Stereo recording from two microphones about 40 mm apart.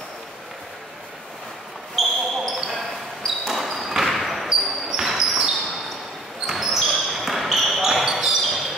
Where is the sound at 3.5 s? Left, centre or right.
Centre.